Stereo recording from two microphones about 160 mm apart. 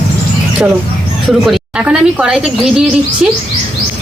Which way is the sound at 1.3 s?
Centre (ahead or behind).